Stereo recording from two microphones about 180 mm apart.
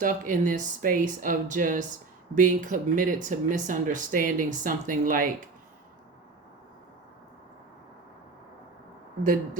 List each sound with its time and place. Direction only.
0.0 s speech: 45° right (ahead or behind)